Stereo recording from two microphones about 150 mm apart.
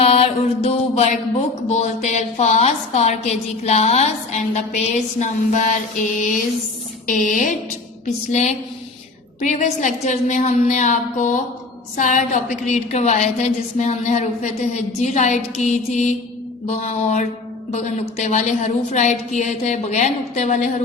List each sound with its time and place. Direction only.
0.0 s mantra: 40° left (ahead or behind); by 6.4 s 55° left (ahead or behind)
7.1 s speech: 60° left (ahead or behind)
8.0 s mantra: 50° left (ahead or behind)